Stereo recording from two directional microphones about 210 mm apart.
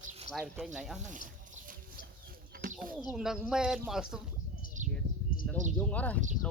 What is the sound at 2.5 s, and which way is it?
Bird, 40° right (ahead or behind).